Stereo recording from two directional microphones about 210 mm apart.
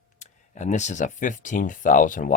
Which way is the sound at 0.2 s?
35° left (ahead or behind).